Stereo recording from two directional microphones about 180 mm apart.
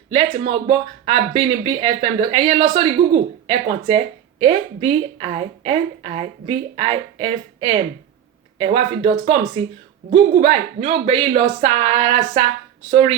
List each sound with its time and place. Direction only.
0.3 s speech: 35° right (ahead or behind)